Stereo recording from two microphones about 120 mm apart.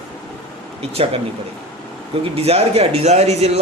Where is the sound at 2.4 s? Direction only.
60° right (ahead or behind).